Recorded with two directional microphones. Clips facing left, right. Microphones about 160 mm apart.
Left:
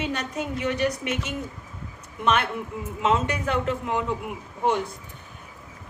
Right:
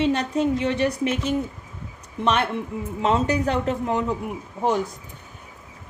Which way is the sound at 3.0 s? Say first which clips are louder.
Right 3 dB; 35° right (ahead or behind).